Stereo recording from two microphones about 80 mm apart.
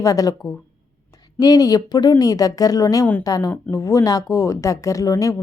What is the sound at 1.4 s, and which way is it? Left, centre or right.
Speech, left.